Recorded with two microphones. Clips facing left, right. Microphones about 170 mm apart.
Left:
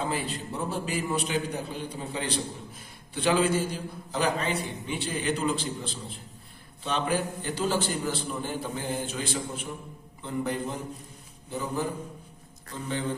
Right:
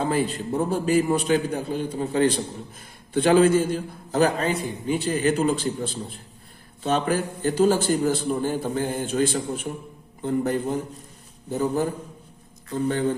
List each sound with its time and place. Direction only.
0.1 s a man's voice: 45° right (ahead or behind)
12.7 s a man's voice: 45° right (ahead or behind)